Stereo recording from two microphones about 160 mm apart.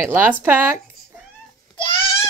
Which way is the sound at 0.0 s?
15° right (ahead or behind).